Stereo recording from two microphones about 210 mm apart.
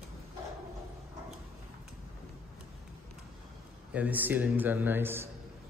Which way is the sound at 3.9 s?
5° right (ahead or behind).